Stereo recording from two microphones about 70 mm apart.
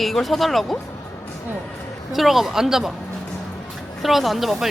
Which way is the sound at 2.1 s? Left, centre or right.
Centre.